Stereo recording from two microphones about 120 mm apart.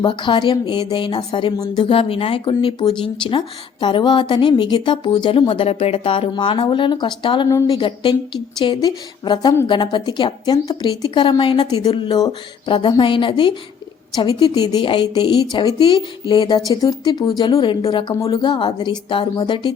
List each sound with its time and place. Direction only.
0.0 s a woman's voice: 40° left (ahead or behind)
5.6 s a woman's voice: 55° left (ahead or behind)